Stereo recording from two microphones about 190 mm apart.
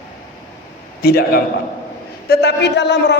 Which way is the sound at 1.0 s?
55° left (ahead or behind).